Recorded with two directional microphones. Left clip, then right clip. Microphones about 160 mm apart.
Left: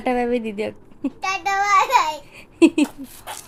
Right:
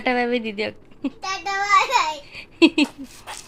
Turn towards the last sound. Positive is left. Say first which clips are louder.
# left 1 dB
turn(degrees=15)  # may be behind; listen again after turning